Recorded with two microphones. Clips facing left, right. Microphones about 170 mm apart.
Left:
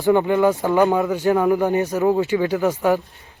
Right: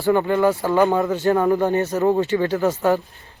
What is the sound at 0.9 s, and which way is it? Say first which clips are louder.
Speech: even; centre (ahead or behind).